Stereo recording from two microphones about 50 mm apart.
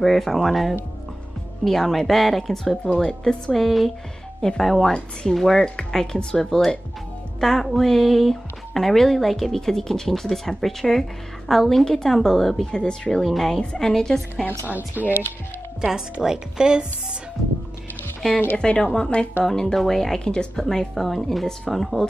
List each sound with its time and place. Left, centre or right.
0.0 s a woman's voice: centre
3.5 s a woman's voice: centre
15.0 s speech: right
15.8 s speech: centre
18.6 s a woman's voice: centre